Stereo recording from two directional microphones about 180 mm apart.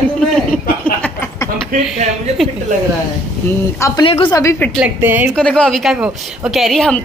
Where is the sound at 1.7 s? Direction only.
50° right (ahead or behind).